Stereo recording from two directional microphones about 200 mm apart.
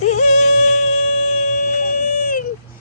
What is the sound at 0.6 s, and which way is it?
Baby cry, 35° left (ahead or behind).